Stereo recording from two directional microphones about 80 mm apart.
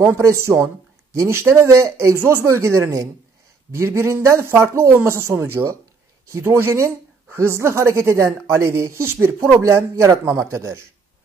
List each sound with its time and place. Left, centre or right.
0.0 s speech: right